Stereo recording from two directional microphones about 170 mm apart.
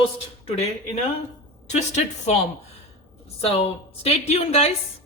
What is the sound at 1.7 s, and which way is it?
A woman's voice, 40° left (ahead or behind).